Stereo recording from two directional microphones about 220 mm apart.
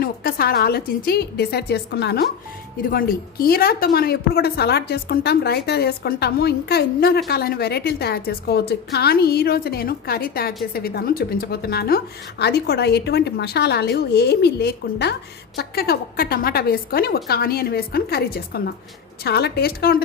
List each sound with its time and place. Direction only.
0.0 s a woman's voice: 45° left (ahead or behind)